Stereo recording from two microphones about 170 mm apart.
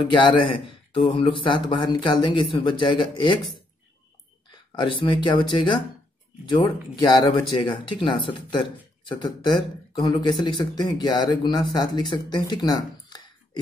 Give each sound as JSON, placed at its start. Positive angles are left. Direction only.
{"t": 0.1, "sound": "speech", "side_deg": 30}
{"t": 4.5, "sound": "speech", "side_deg": 30}